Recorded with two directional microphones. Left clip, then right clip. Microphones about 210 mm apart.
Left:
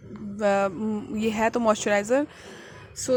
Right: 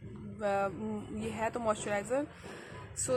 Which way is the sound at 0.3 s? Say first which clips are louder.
Left 9 dB; 35° left (ahead or behind).